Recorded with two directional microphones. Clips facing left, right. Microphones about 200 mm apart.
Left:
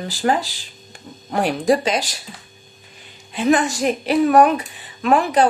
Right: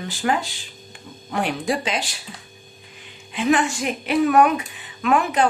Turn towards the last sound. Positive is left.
turn(degrees=35)  # may be behind; listen again after turning